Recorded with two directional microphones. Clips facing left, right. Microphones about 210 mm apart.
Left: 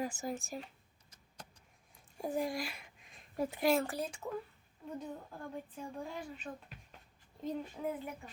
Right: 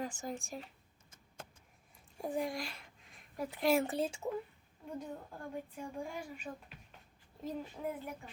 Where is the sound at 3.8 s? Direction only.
25° right (ahead or behind).